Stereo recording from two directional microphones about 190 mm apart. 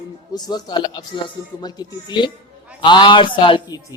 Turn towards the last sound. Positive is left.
turn(degrees=25)  # may be behind; listen again after turning